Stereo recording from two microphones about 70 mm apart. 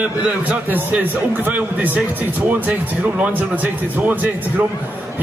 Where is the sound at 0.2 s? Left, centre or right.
Centre.